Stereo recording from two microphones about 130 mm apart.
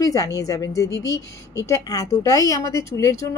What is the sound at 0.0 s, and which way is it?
A woman's voice, 30° left (ahead or behind).